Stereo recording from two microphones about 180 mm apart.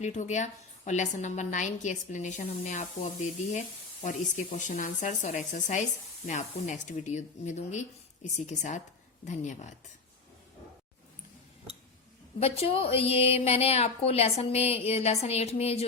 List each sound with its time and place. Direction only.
0.0 s a woman's voice: 40° left (ahead or behind)
12.4 s a woman's voice: 35° left (ahead or behind)